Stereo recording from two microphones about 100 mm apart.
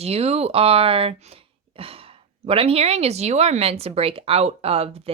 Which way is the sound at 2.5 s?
75° right (ahead or behind).